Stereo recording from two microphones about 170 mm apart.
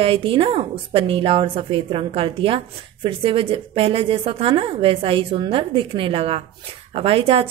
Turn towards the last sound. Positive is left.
turn(degrees=-35)  # may be behind; listen again after turning